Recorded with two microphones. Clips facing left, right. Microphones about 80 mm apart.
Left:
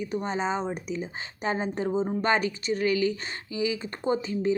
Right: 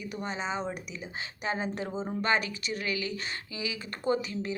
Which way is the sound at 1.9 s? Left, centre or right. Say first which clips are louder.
Left 7 dB; centre.